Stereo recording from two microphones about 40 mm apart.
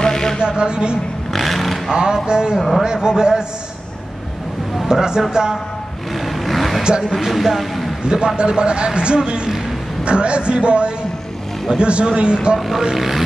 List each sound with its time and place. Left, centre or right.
0.0 s a sound: centre
0.4 s speech: right
1.3 s vehicle: centre
2.2 s speech: right
4.8 s speech: centre
6.2 s vehicle: centre
6.8 s speech: right
7.1 s speech: centre
8.0 s a man's voice: right
12.5 s speech: centre